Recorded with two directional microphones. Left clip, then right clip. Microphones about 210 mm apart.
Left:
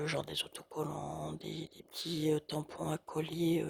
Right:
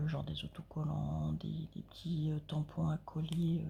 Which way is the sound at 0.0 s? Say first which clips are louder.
Left 8 dB; 45° left (ahead or behind).